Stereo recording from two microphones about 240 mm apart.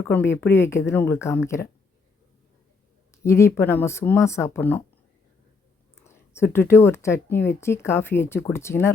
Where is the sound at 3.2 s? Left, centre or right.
Centre.